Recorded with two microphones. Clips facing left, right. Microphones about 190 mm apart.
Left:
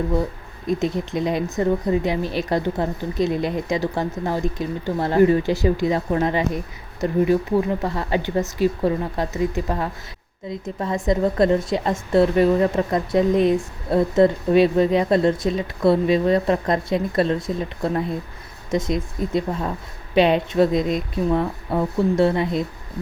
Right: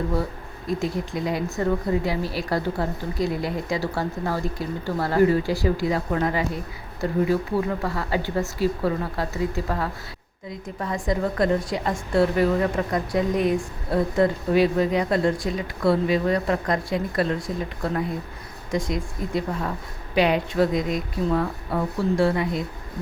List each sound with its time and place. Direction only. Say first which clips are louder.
0.7 s a woman's voice: left 4 dB; 20° left (ahead or behind)